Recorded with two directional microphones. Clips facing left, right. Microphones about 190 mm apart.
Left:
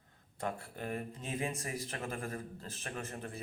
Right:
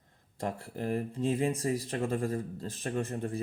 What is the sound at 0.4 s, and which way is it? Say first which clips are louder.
Speech: right 5 dB; 30° right (ahead or behind).